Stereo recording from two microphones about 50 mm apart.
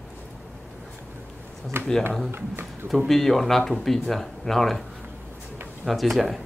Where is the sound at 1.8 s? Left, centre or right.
Right.